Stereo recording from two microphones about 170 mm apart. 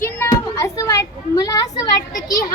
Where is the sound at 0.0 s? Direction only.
15° left (ahead or behind).